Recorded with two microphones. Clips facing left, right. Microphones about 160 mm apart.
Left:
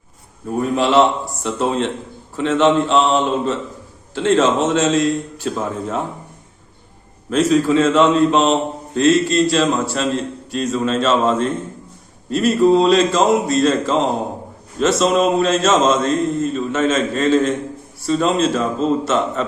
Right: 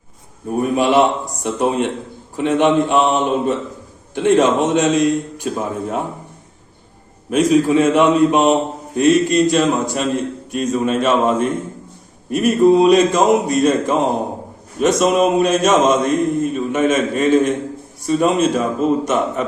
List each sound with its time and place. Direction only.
0.6 s speech: 15° right (ahead or behind)
7.3 s speech: 15° right (ahead or behind)